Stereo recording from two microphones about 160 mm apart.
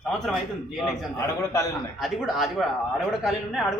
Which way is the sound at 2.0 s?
Centre (ahead or behind).